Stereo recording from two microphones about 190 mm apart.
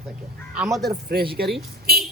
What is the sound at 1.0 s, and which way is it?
Speech, 55° right (ahead or behind).